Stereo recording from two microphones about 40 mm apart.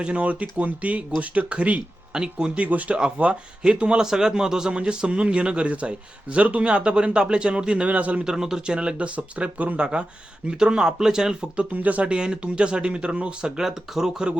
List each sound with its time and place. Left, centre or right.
0.0 s speech: right
2.1 s speech: right
2.6 s speech: right
7.9 s speech: right
8.2 s speech: centre
10.6 s speech: centre
11.5 s speech: right
12.1 s speech: right
13.6 s speech: centre